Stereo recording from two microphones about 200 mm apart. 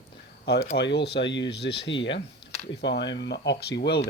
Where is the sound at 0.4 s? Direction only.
50° left (ahead or behind).